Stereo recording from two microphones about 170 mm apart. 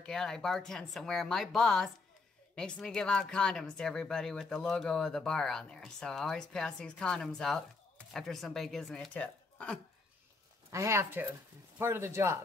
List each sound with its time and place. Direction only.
0.0 s speech: 5° left (ahead or behind)
10.7 s speech: 15° right (ahead or behind)